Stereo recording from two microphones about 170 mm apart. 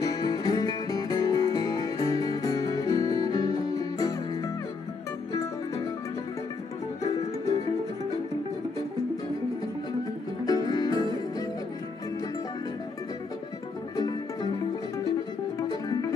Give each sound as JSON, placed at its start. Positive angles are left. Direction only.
{"t": 0.0, "sound": "music", "side_deg": 20}
{"t": 10.4, "sound": "music", "side_deg": 20}
{"t": 13.9, "sound": "music", "side_deg": 20}